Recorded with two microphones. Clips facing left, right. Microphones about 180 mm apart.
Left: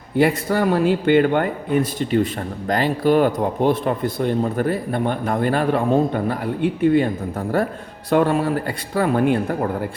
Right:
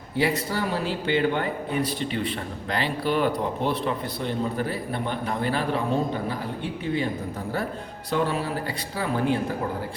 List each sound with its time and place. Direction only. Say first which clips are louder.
0.2 s a man's voice: left 7 dB; 55° left (ahead or behind)
8.1 s speech: left 8 dB; 55° left (ahead or behind)